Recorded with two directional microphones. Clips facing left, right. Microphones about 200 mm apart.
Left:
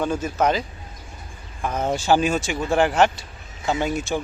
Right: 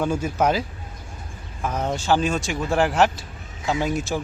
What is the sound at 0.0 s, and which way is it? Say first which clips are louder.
Speech: even; 10° right (ahead or behind).